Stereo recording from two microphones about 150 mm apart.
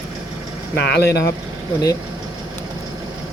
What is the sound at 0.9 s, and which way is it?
Speech, 90° left.